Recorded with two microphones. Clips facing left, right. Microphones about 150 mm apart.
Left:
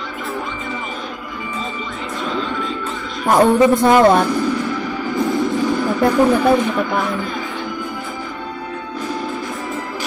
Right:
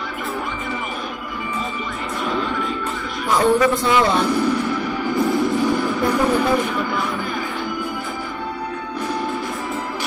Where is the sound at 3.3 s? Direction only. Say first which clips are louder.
Left 4 dB; 50° left (ahead or behind).